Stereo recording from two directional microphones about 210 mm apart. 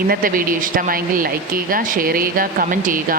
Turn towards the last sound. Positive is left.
turn(degrees=-40)  # may be behind; listen again after turning